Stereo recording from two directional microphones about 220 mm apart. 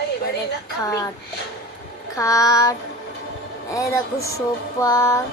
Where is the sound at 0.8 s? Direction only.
15° left (ahead or behind).